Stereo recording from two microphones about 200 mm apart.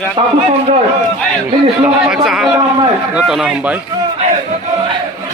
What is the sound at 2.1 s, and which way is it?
A man's voice, 5° right (ahead or behind).